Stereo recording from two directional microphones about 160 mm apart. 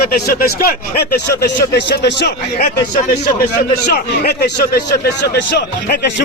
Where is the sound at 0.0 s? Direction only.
70° left (ahead or behind).